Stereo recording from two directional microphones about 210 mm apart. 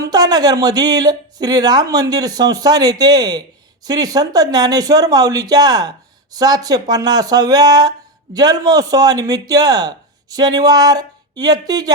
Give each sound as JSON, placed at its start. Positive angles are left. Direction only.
{"t": 0.0, "sound": "speech", "side_deg": -20}